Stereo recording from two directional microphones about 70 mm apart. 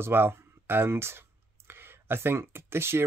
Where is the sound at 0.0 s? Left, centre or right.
Right.